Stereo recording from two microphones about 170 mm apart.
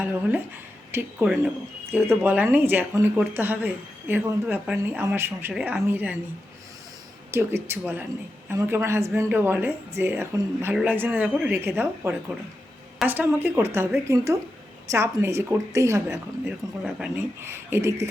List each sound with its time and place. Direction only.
0.0 s speech: 10° right (ahead or behind)
7.3 s speech: 15° right (ahead or behind)
14.8 s speech: 15° right (ahead or behind)
16.5 s speech: 5° right (ahead or behind)